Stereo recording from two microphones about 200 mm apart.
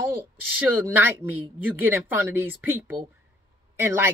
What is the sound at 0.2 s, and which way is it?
Speech, 10° right (ahead or behind).